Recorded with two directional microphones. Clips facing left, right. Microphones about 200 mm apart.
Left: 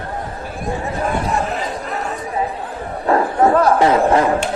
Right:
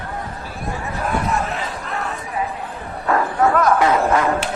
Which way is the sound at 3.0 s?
30° left (ahead or behind).